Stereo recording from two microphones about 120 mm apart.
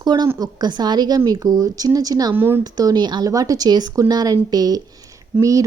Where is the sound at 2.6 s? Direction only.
30° right (ahead or behind).